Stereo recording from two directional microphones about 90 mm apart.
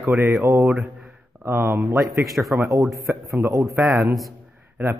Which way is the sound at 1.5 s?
25° right (ahead or behind).